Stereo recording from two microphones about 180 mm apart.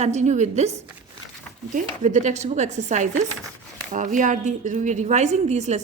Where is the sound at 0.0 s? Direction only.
40° right (ahead or behind).